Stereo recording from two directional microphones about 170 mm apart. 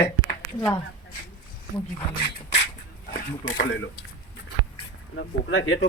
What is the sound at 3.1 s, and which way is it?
Speech, 60° left (ahead or behind).